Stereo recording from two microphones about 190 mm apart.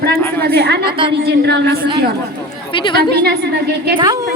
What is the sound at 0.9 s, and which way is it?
Speech, 25° right (ahead or behind).